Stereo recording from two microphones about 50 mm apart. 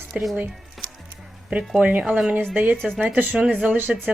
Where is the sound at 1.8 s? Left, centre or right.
Right.